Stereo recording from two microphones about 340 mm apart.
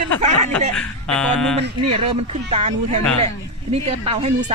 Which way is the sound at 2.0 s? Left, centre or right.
Centre.